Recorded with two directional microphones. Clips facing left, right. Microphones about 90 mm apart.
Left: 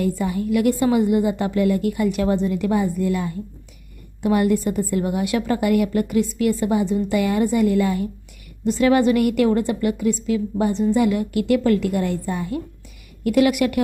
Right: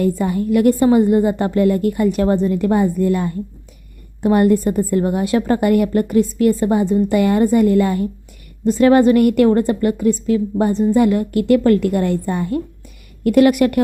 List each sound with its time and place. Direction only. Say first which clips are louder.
0.0 s a woman's voice: right 4 dB; 45° right (ahead or behind)